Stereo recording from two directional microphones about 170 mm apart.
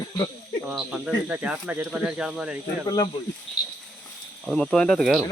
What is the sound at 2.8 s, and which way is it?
Speech, 20° left (ahead or behind).